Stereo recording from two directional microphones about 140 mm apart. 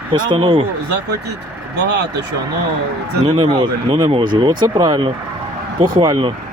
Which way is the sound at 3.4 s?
35° right (ahead or behind).